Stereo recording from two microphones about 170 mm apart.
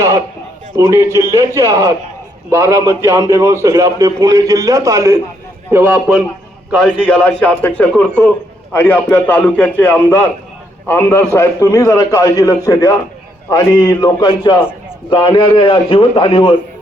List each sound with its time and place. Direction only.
0.8 s a man's voice: 15° right (ahead or behind)
6.8 s a man's voice: 5° left (ahead or behind); by 16.6 s 30° left (ahead or behind)